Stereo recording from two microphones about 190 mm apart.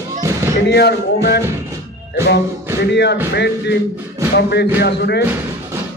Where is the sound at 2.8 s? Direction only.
65° left (ahead or behind).